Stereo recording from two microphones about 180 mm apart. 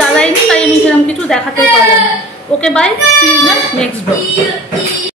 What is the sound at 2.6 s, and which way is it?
Speech, 5° left (ahead or behind).